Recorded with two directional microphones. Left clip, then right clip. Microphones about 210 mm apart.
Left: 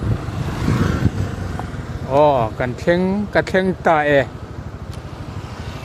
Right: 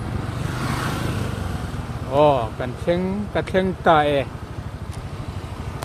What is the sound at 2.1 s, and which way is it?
Speech, 25° left (ahead or behind).